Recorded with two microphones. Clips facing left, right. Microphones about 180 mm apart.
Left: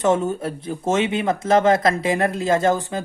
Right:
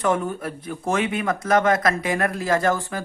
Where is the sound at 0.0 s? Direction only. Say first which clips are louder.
Left 3 dB; 25° left (ahead or behind).